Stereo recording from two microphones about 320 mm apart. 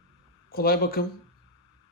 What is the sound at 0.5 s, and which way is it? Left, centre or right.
Speech, left.